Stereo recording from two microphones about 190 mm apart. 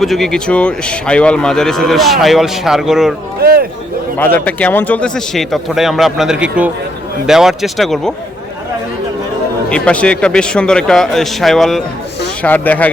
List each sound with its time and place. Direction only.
0.0 s speech: centre (ahead or behind)
3.4 s speech: 50° right (ahead or behind)
4.2 s speech: 10° left (ahead or behind)
9.6 s speech: 5° left (ahead or behind)